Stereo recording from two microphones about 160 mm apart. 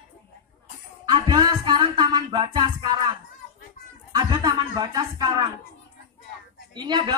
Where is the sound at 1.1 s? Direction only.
25° right (ahead or behind).